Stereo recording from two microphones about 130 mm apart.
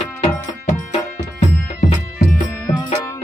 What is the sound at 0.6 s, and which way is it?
Music, 60° left (ahead or behind).